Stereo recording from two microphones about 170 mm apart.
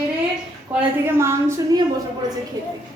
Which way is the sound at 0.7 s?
15° right (ahead or behind).